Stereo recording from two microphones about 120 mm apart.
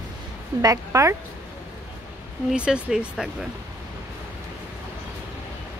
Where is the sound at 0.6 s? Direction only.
25° right (ahead or behind).